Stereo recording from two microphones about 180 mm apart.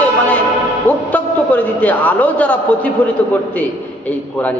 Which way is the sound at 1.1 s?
10° left (ahead or behind).